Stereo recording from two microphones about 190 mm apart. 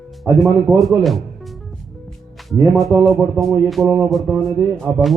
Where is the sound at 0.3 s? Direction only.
5° right (ahead or behind).